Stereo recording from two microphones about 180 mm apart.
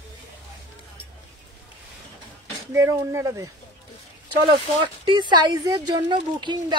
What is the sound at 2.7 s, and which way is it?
Speech, 15° right (ahead or behind).